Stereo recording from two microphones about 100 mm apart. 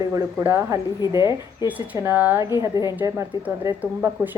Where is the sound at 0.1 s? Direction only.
25° right (ahead or behind).